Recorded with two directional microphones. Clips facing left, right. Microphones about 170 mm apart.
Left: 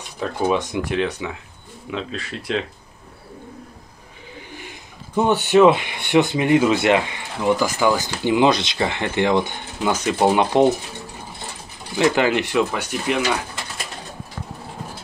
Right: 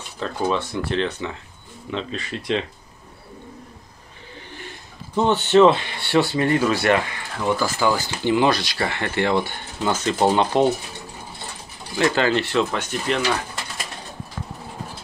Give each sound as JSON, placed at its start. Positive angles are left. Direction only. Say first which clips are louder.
{"t": 0.5, "sound": "speech", "louder": "left 2 dB", "side_deg": 15}
{"t": 5.1, "sound": "speech", "louder": "even", "side_deg": 10}
{"t": 12.0, "sound": "speech", "louder": "left 2 dB", "side_deg": 15}